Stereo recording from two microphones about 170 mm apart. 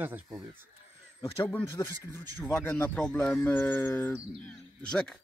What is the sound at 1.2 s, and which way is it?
Speech, 15° left (ahead or behind).